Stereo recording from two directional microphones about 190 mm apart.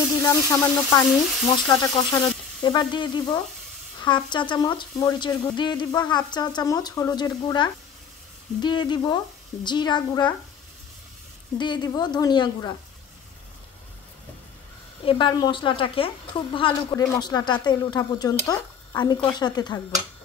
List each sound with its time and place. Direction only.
0.2 s speech: 15° left (ahead or behind)
11.5 s speech: 25° left (ahead or behind)
15.0 s speech: 25° left (ahead or behind)